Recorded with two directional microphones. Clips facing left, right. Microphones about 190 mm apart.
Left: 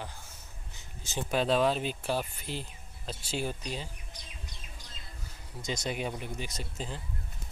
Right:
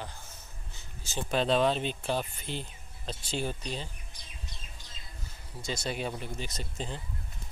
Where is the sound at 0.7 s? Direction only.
15° left (ahead or behind).